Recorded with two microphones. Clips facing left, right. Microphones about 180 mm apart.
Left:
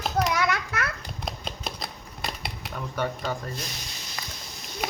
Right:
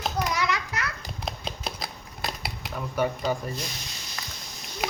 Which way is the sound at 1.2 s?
Centre (ahead or behind).